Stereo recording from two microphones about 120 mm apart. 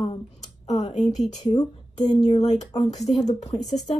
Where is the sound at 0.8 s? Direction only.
75° left (ahead or behind).